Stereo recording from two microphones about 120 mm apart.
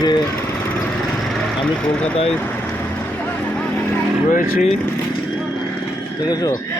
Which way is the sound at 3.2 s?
15° left (ahead or behind).